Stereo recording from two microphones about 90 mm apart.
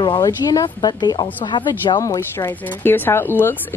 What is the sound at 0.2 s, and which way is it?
Speech, 45° left (ahead or behind).